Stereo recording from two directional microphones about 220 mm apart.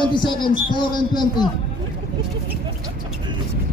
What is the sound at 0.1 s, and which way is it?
Speech, 20° left (ahead or behind).